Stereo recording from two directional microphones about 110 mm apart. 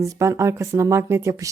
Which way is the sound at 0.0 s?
25° right (ahead or behind).